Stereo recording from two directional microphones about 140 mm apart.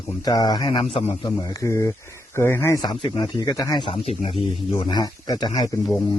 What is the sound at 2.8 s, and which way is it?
Speech, 30° left (ahead or behind).